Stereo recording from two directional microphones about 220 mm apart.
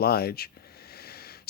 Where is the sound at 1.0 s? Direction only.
45° left (ahead or behind).